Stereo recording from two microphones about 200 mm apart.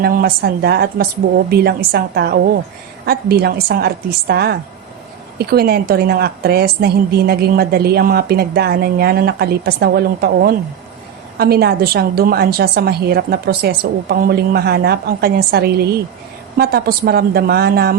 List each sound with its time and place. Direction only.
0.0 s a woman's voice: 50° right (ahead or behind)